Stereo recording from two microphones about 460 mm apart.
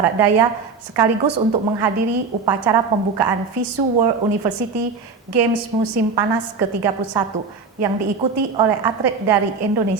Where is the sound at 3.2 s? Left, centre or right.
Right.